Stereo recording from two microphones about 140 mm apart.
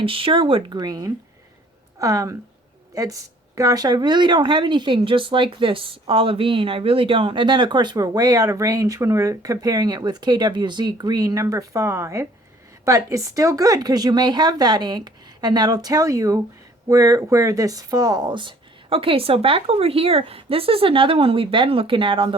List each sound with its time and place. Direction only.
0.0 s speech: 40° right (ahead or behind)